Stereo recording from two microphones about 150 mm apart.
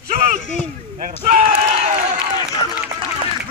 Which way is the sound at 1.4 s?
45° right (ahead or behind).